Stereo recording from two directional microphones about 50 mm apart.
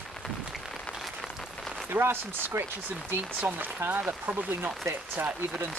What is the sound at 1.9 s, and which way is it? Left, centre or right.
Speech, right.